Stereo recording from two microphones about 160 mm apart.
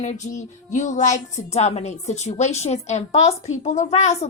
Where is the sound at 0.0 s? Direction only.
45° left (ahead or behind).